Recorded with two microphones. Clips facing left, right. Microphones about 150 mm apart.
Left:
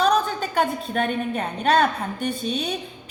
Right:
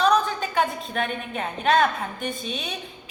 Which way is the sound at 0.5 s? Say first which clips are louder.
Left 3 dB; 40° left (ahead or behind).